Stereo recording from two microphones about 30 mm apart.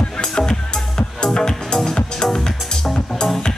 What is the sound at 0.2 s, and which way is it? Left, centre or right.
Music, left.